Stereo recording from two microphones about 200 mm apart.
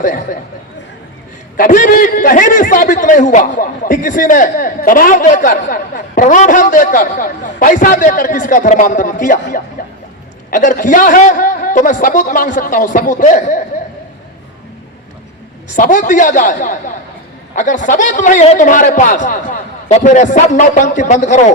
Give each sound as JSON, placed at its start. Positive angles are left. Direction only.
{"t": 1.5, "sound": "a man's voice", "side_deg": 45}
{"t": 9.8, "sound": "music", "side_deg": 45}
{"t": 10.5, "sound": "a man's voice", "side_deg": 40}
{"t": 15.7, "sound": "a man's voice", "side_deg": 40}